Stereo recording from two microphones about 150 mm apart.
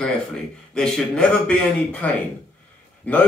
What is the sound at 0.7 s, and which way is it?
Speech, 5° left (ahead or behind).